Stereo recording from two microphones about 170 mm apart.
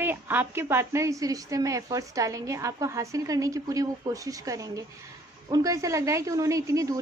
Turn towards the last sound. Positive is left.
turn(degrees=-20)  # may be behind; listen again after turning